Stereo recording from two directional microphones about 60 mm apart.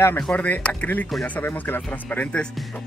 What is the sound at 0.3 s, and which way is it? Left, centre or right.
Speech, left.